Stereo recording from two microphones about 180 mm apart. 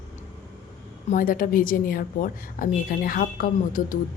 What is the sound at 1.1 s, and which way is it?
Speech, 50° left (ahead or behind).